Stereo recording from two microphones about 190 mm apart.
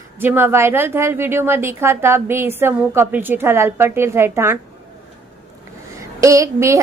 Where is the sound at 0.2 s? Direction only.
10° right (ahead or behind).